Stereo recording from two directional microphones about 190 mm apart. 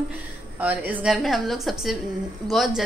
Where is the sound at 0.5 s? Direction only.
10° right (ahead or behind).